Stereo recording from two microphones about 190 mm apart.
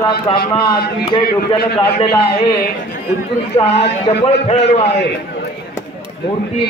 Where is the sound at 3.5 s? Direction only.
35° left (ahead or behind).